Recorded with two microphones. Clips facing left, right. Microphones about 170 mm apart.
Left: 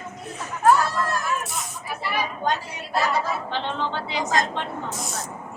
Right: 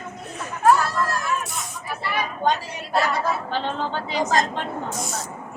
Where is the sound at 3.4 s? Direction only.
40° right (ahead or behind).